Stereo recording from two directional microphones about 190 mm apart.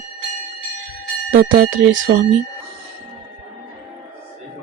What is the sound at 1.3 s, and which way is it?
Speech, 45° right (ahead or behind).